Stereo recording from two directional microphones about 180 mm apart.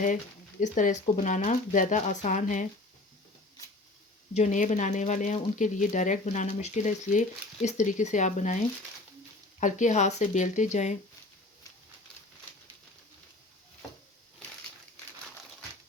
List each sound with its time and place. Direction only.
0.6 s speech: 45° left (ahead or behind)
4.4 s speech: 45° left (ahead or behind)